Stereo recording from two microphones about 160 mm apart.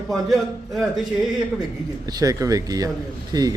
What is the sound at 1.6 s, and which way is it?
Speech, 25° right (ahead or behind).